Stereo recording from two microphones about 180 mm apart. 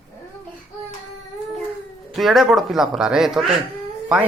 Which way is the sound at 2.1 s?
Centre (ahead or behind).